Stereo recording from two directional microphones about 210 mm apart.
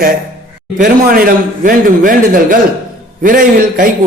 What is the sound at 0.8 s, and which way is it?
A man's voice, 40° right (ahead or behind).